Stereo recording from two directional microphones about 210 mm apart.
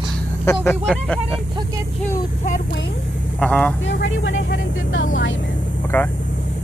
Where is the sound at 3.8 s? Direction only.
60° left (ahead or behind).